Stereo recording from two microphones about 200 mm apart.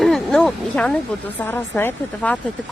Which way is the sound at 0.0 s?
Centre (ahead or behind).